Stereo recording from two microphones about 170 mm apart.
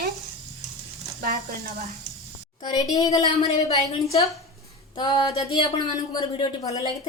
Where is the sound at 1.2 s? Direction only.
50° right (ahead or behind).